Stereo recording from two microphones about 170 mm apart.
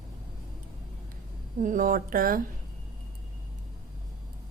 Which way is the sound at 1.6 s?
50° right (ahead or behind).